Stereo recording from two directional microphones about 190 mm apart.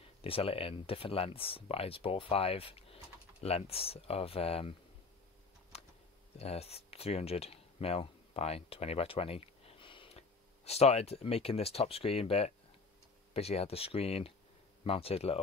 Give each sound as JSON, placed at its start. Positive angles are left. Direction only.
{"t": 0.0, "sound": "speech", "side_deg": 30}
{"t": 5.7, "sound": "a sound", "side_deg": 35}
{"t": 6.3, "sound": "speech", "side_deg": 30}